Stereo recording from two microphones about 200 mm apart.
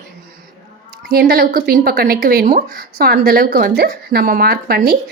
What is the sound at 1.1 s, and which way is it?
Speech, 50° right (ahead or behind).